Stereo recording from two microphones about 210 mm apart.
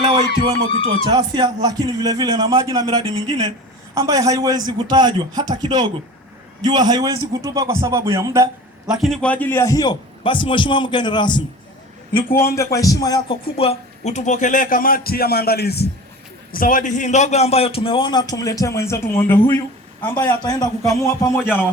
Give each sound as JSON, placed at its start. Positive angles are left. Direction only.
{"t": 1.1, "sound": "a man's voice", "side_deg": -20}
{"t": 8.9, "sound": "a man's voice", "side_deg": 0}
{"t": 20.2, "sound": "speech", "side_deg": 20}